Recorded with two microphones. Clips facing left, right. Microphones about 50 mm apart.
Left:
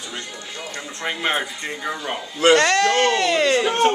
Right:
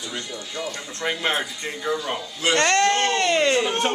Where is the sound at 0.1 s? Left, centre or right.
Centre.